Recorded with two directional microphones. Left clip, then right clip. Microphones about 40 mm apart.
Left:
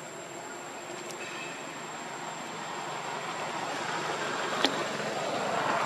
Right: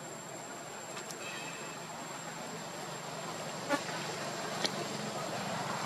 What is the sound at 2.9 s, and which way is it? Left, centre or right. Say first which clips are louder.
Vehicle: left 6 dB; left.